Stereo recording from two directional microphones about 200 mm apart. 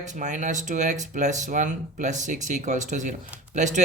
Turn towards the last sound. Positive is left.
turn(degrees=-35)  # may be behind; listen again after turning